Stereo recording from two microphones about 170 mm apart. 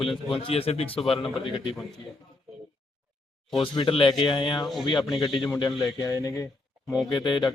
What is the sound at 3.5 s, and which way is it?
Speech, 30° left (ahead or behind).